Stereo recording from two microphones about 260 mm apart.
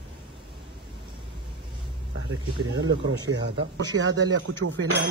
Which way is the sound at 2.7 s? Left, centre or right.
Right.